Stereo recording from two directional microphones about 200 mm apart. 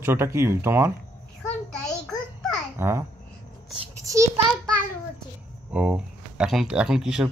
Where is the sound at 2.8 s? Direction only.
15° right (ahead or behind).